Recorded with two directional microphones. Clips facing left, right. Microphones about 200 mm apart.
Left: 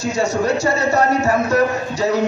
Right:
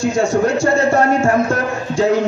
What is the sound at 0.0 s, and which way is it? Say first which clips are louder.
A man's voice: right 4 dB; 50° right (ahead or behind).